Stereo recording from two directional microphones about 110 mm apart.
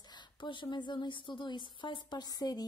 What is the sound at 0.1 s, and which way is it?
A woman's voice, 45° left (ahead or behind).